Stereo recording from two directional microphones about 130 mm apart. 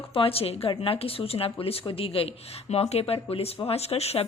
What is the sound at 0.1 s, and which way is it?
A woman's voice, 45° left (ahead or behind).